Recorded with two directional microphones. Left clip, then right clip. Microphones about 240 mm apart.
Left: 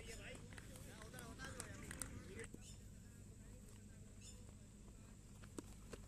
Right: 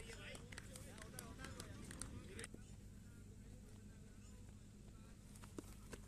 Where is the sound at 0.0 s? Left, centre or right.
Right.